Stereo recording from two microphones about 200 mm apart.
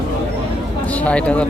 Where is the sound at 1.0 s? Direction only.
5° left (ahead or behind).